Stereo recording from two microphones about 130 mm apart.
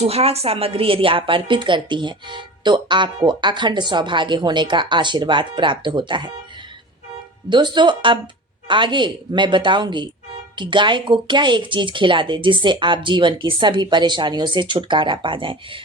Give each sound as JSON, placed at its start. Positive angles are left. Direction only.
{"t": 0.0, "sound": "a woman's voice", "side_deg": -50}
{"t": 7.5, "sound": "a woman's voice", "side_deg": -35}